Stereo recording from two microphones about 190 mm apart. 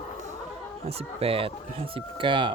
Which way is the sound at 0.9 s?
30° right (ahead or behind).